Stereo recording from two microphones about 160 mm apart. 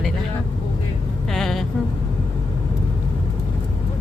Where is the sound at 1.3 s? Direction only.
Centre (ahead or behind).